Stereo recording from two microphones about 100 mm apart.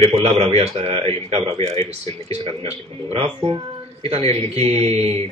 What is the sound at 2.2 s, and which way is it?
Speech, 75° right (ahead or behind).